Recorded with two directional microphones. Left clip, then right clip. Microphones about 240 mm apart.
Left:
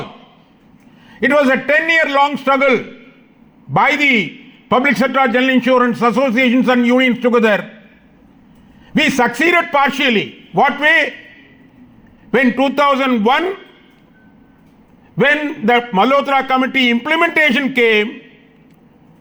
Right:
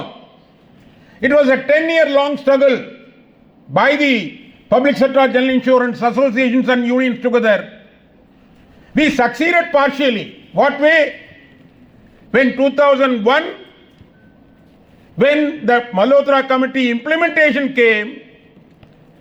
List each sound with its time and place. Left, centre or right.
1.1 s a man's voice: left
9.0 s a man's voice: left
12.3 s a man's voice: left
15.2 s a man's voice: left